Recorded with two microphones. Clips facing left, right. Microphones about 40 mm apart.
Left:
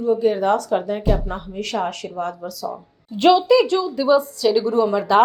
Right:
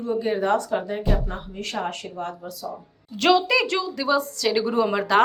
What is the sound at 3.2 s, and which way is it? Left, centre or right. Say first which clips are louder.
Speech: left 5 dB; centre.